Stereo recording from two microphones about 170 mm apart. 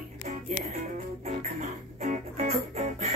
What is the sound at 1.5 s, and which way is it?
Music, 45° right (ahead or behind).